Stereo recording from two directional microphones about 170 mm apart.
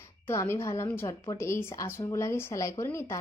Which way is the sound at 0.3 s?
15° left (ahead or behind).